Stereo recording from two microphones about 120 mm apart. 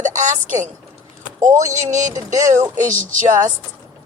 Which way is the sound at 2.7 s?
90° right.